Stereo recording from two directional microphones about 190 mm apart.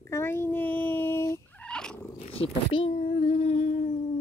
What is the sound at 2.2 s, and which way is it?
Speech, 30° left (ahead or behind).